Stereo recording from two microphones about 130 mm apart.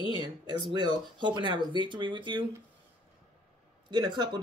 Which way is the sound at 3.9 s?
35° right (ahead or behind).